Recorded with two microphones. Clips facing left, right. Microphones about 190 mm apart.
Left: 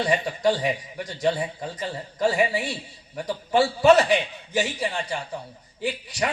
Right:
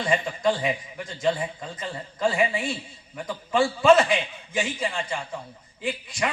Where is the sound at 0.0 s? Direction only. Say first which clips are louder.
Left 1 dB; 35° left (ahead or behind).